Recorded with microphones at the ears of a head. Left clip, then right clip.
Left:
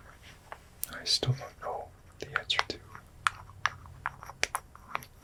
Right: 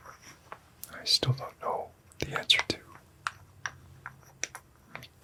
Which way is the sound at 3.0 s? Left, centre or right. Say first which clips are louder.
Left 6 dB; left.